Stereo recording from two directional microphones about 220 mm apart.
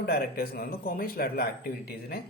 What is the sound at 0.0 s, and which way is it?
Speech, 45° left (ahead or behind).